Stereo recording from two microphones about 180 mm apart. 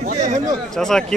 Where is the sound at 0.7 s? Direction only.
5° left (ahead or behind).